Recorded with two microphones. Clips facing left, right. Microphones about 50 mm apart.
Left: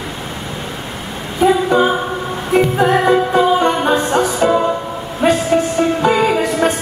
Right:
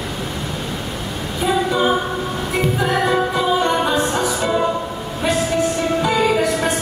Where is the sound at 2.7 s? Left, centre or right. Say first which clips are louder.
Left 3 dB; left.